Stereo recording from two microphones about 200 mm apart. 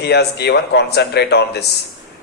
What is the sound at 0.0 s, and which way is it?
A man's voice, 55° left (ahead or behind).